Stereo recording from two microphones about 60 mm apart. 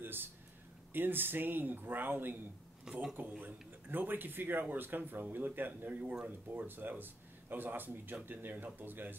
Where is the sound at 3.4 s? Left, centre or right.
Right.